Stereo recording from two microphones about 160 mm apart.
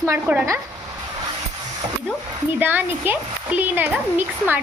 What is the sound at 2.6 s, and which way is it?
Speech, 10° right (ahead or behind).